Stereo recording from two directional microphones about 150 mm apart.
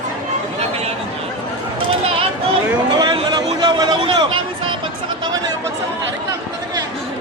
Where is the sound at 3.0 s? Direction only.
25° right (ahead or behind).